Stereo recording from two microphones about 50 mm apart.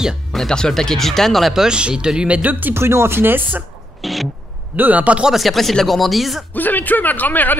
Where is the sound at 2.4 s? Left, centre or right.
Right.